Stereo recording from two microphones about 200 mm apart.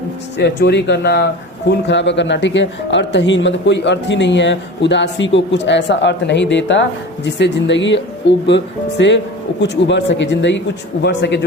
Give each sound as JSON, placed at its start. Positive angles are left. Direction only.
{"t": 0.3, "sound": "a man's voice", "side_deg": 60}